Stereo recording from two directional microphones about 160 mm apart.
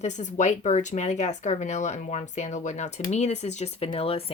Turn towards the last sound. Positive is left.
turn(degrees=35)  # may be behind; listen again after turning